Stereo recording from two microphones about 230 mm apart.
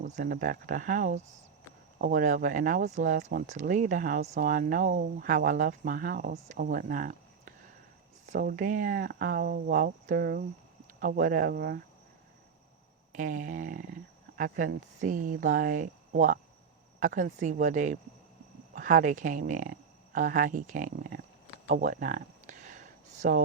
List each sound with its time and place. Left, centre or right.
0.0 s speech: right
13.1 s speech: right
21.7 s a sound: right